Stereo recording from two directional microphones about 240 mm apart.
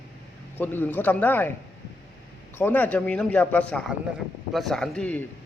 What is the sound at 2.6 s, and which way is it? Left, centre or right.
A man's voice, centre.